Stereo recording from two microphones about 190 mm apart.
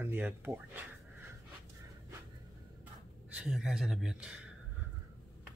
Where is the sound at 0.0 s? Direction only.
10° right (ahead or behind).